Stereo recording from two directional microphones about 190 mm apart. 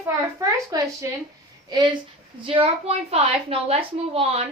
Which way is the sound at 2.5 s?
30° right (ahead or behind).